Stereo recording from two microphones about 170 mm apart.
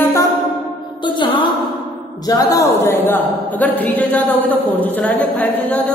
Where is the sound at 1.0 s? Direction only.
30° left (ahead or behind).